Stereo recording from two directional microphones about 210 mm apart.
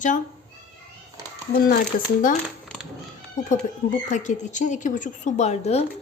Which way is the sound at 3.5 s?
35° left (ahead or behind).